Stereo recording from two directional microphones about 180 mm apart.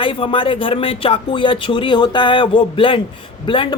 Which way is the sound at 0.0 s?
30° left (ahead or behind).